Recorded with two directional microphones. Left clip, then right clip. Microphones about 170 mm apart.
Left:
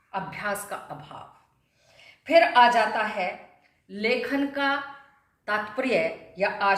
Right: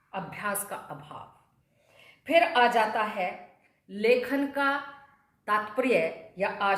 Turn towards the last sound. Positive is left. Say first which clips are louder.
# left 4 dB
turn(degrees=-20)  # may be behind; listen again after turning